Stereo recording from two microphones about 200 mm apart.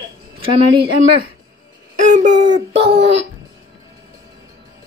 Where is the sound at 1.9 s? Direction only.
40° right (ahead or behind).